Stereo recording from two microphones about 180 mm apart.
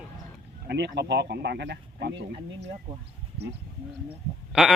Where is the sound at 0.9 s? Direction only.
70° right (ahead or behind).